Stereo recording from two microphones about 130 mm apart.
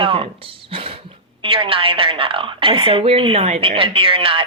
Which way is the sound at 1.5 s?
45° right (ahead or behind).